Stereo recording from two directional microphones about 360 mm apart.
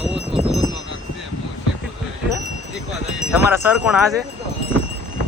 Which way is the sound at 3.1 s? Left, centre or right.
Centre.